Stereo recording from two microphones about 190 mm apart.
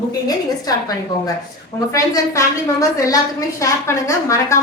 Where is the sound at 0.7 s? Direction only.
20° left (ahead or behind).